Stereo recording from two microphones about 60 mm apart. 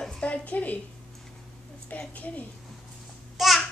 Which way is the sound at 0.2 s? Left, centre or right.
Left.